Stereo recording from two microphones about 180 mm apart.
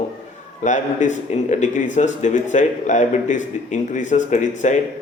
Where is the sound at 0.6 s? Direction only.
45° left (ahead or behind).